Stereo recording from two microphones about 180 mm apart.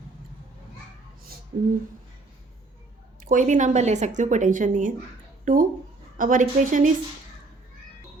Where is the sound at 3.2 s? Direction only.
45° right (ahead or behind).